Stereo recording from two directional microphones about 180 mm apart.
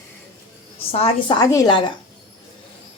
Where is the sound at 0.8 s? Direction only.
35° left (ahead or behind).